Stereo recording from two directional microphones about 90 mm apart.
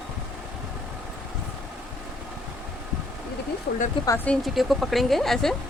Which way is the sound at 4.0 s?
75° left (ahead or behind).